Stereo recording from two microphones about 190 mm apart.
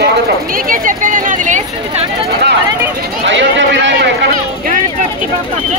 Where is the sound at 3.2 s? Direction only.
75° right (ahead or behind).